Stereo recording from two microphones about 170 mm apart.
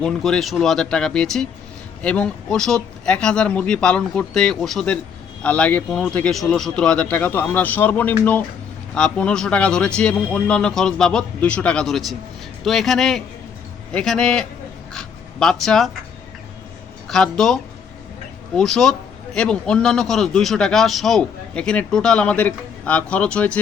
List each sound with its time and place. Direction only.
0.0 s a man's voice: 5° left (ahead or behind)
17.1 s a man's voice: centre (ahead or behind)